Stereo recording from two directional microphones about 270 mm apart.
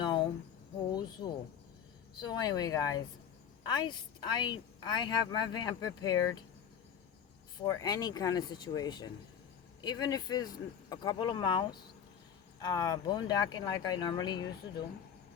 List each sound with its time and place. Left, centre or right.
0.0 s a sound: centre
2.2 s a woman's voice: centre
7.6 s a woman's voice: centre